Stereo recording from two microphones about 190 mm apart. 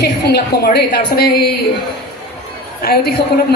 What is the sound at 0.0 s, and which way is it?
A woman's voice, 60° left (ahead or behind).